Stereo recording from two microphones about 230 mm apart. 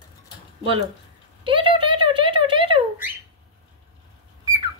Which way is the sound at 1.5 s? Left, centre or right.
Right.